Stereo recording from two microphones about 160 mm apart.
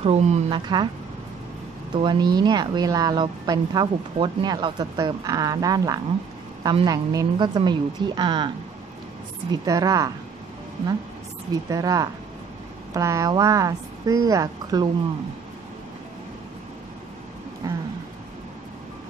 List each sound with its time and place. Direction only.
0.0 s a woman's voice: 45° right (ahead or behind)
0.5 s a woman's voice: 30° right (ahead or behind)
2.0 s a woman's voice: 30° right (ahead or behind)
9.5 s a woman's voice: 25° right (ahead or behind)
11.7 s a woman's voice: 25° right (ahead or behind)
17.6 s a sound: 20° right (ahead or behind)